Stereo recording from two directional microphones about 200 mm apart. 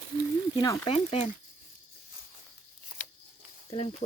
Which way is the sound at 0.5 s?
20° left (ahead or behind).